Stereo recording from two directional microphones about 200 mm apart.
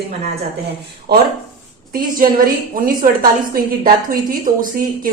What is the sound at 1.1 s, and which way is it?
Speech, 55° right (ahead or behind).